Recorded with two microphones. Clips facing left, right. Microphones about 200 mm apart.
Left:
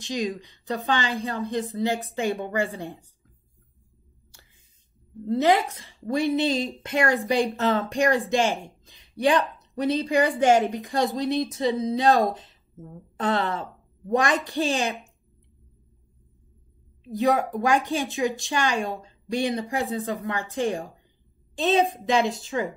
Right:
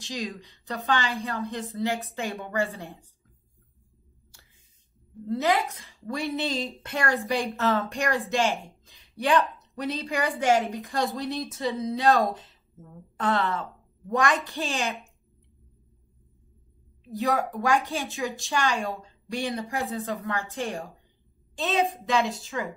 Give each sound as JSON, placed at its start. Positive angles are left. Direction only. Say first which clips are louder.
{"t": 0.0, "sound": "a woman's voice", "louder": "left 6 dB", "side_deg": 20}
{"t": 5.3, "sound": "a woman's voice", "louder": "left 4 dB", "side_deg": 25}
{"t": 17.1, "sound": "a woman's voice", "louder": "left 4 dB", "side_deg": 20}